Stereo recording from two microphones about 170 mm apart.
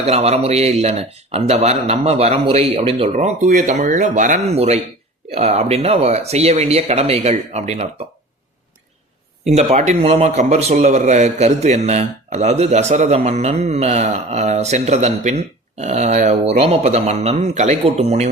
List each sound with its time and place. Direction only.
0.0 s a man's voice: 40° right (ahead or behind)
9.5 s a man's voice: 40° right (ahead or behind)